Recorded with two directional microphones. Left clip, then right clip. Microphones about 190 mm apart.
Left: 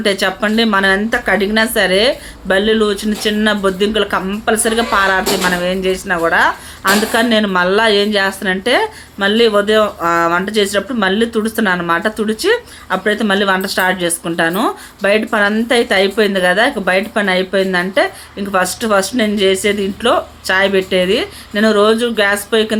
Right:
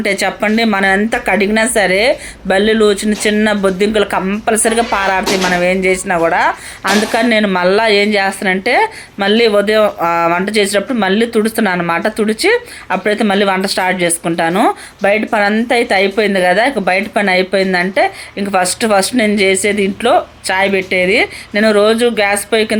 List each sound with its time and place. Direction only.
0.0 s a woman's voice: 15° right (ahead or behind)